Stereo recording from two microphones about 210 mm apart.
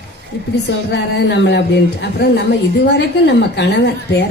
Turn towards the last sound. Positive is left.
turn(degrees=55)  # may be behind; listen again after turning